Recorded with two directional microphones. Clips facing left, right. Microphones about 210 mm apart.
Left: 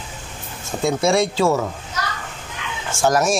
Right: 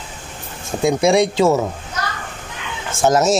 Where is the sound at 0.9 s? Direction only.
15° right (ahead or behind).